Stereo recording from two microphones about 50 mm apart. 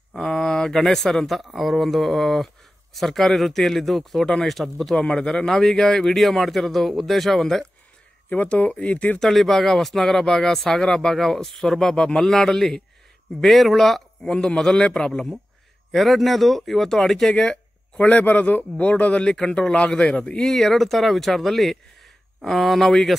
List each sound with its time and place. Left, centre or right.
0.2 s speech: centre
8.3 s a man's voice: left
9.2 s speech: centre
14.2 s speech: centre
15.9 s a man's voice: centre; by 19.2 s left
19.2 s a man's voice: centre
20.5 s speech: centre